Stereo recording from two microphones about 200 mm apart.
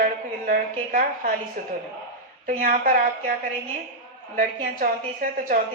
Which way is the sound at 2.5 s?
45° right (ahead or behind).